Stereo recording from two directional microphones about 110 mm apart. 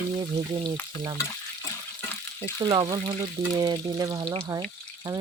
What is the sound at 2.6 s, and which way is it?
Speech, 50° right (ahead or behind).